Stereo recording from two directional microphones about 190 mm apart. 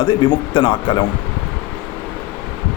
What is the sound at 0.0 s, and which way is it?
Speech, 25° left (ahead or behind).